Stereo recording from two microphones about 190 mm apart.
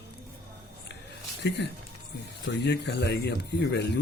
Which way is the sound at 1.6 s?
65° left (ahead or behind).